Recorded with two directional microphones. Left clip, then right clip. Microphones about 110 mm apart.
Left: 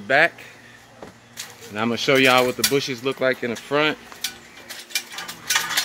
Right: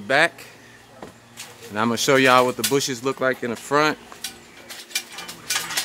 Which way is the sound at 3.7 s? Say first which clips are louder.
Right 1 dB; 20° right (ahead or behind).